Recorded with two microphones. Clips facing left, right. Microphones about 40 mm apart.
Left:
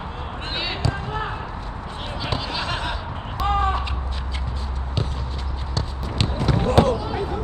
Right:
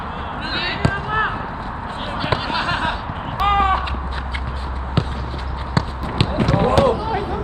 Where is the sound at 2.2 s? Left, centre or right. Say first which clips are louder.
Right 6 dB; right.